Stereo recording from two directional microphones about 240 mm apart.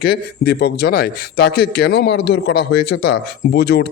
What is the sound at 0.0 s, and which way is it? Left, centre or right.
Speech, left.